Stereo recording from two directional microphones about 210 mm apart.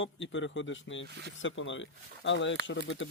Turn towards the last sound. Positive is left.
turn(degrees=65)  # may be behind; listen again after turning